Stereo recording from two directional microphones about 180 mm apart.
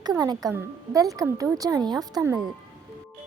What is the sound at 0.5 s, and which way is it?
Speech, 20° right (ahead or behind).